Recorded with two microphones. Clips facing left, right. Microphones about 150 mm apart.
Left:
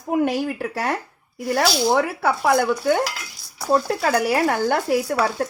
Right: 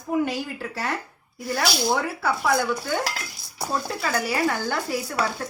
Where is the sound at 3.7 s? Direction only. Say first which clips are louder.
Left 8 dB; 55° left (ahead or behind).